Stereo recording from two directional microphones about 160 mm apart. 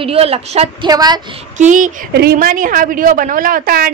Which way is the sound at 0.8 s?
25° right (ahead or behind).